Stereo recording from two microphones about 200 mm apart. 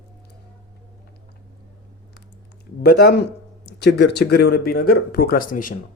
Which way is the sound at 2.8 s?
55° left (ahead or behind).